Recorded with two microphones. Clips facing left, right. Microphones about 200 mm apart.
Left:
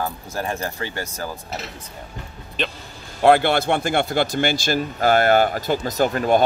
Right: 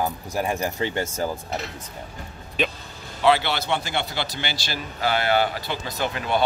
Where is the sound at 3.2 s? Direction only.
50° left (ahead or behind).